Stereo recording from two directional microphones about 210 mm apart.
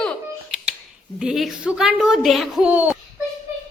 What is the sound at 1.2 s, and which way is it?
Speech, centre (ahead or behind).